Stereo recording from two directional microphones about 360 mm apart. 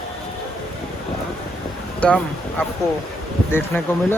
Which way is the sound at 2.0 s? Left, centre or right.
Centre.